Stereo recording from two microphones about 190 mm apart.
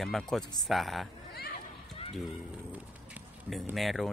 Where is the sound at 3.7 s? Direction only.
Centre (ahead or behind).